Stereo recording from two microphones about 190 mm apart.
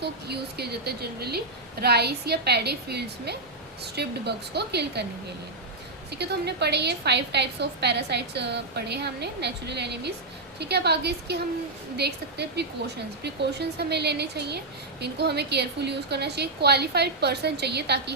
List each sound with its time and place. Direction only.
0.0 s a woman's voice: 60° right (ahead or behind)
6.1 s a woman's voice: 60° right (ahead or behind)